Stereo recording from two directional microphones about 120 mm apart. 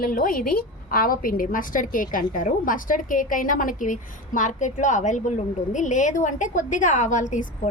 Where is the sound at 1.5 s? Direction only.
90° left.